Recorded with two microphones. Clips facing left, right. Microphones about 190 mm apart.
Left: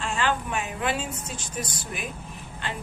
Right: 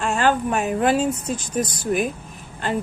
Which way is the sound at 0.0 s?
45° right (ahead or behind).